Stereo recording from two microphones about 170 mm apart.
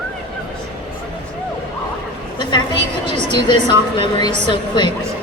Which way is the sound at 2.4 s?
25° left (ahead or behind).